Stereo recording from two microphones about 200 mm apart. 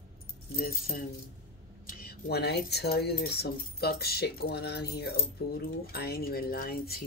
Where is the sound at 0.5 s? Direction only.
50° left (ahead or behind).